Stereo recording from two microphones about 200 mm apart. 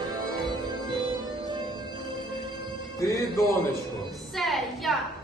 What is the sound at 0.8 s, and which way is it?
Music, 25° right (ahead or behind).